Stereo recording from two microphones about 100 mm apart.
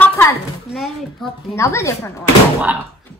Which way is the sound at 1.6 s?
30° left (ahead or behind).